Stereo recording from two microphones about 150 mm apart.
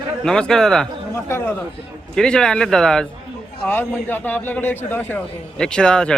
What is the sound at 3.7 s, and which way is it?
A man's voice, 15° left (ahead or behind).